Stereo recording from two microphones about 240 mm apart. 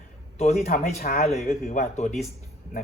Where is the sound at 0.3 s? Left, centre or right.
Left.